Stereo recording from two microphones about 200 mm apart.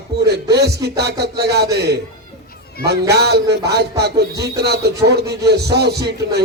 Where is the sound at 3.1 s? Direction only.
55° right (ahead or behind).